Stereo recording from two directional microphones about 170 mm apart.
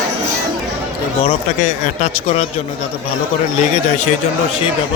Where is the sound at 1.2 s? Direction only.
40° left (ahead or behind).